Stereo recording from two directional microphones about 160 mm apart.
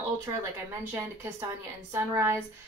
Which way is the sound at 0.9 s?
15° right (ahead or behind).